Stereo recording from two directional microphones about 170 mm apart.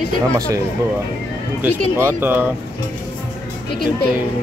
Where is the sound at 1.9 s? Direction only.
15° right (ahead or behind).